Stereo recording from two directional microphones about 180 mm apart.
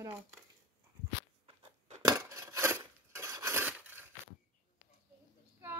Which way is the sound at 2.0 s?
20° right (ahead or behind).